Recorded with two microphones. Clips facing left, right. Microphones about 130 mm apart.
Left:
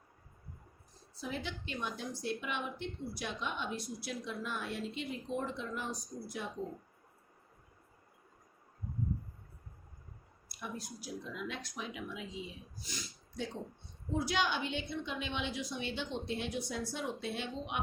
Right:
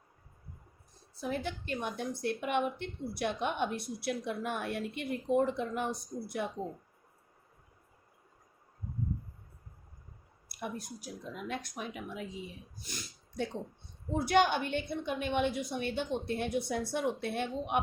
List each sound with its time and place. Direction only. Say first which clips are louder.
1.1 s a woman's voice: right 5 dB; 55° right (ahead or behind)
10.5 s a woman's voice: right 4 dB; 55° right (ahead or behind)
12.7 s snort: even; 55° right (ahead or behind)
14.3 s a woman's voice: right 10 dB; 55° right (ahead or behind)